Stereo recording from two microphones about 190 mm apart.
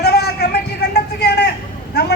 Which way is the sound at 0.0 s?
60° left (ahead or behind).